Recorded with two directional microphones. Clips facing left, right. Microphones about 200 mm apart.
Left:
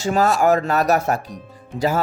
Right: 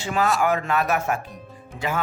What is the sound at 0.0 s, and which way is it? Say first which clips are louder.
Speech: left 5 dB; 40° left (ahead or behind).